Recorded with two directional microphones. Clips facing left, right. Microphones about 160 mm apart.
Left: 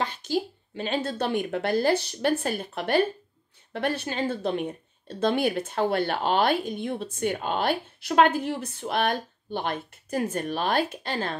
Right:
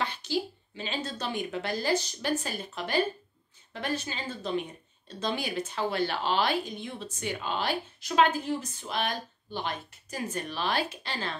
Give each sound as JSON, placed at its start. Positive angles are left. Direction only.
{"t": 0.0, "sound": "speech", "side_deg": 45}